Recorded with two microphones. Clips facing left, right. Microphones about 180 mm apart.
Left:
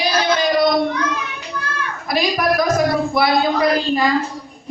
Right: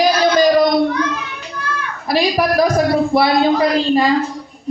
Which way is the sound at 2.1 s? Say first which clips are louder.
Right 3 dB; 30° right (ahead or behind).